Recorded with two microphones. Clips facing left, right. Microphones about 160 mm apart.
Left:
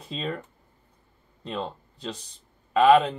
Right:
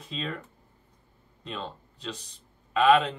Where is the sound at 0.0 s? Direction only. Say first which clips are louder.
Left 3 dB; 35° left (ahead or behind).